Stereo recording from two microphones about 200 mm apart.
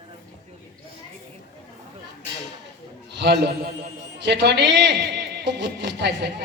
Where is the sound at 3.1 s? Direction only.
55° right (ahead or behind).